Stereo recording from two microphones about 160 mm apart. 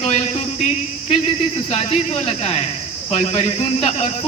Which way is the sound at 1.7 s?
40° left (ahead or behind).